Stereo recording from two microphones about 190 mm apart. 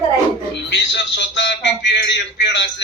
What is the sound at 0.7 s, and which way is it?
Speech, 65° left (ahead or behind).